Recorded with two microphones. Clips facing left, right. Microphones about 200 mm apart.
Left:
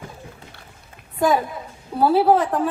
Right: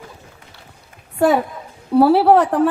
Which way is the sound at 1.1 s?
70° right (ahead or behind).